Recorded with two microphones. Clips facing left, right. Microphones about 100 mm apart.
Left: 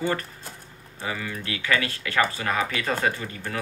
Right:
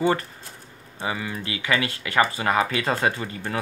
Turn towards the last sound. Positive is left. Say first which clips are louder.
# right 3 dB
turn(degrees=-25)  # may be behind; listen again after turning